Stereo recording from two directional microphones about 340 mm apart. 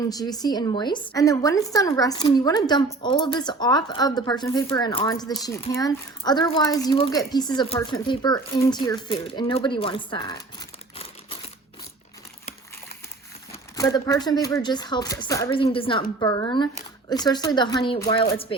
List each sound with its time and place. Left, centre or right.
0.1 s a woman's voice: centre
13.5 s a woman's voice: centre